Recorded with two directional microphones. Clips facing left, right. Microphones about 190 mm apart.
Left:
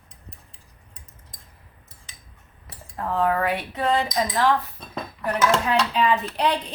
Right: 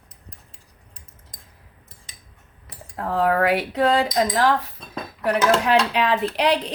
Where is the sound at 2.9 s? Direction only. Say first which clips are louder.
Right 2 dB; 80° right.